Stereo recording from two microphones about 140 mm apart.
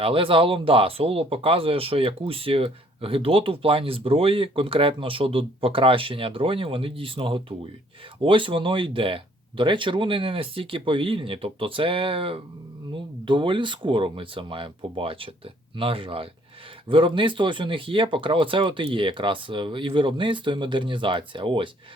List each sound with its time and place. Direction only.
0.0 s speech: 40° right (ahead or behind)